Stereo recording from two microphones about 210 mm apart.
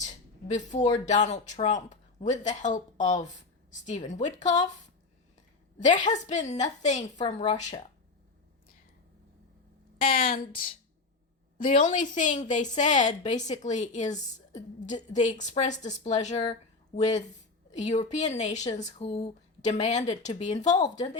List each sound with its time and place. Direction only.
0.5 s speech: 35° left (ahead or behind)
5.8 s speech: 35° left (ahead or behind)
10.0 s a woman's voice: 45° left (ahead or behind)
11.8 s speech: 35° left (ahead or behind)